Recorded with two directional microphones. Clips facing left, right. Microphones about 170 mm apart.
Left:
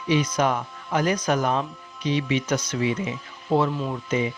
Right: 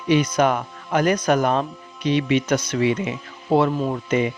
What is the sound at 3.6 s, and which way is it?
Speech, 60° right (ahead or behind).